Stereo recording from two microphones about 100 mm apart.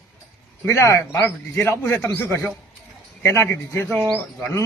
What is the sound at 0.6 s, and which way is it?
A man's voice, 30° left (ahead or behind).